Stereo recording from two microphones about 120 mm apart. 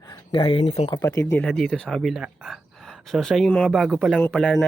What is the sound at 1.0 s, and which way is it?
Speech, 25° left (ahead or behind).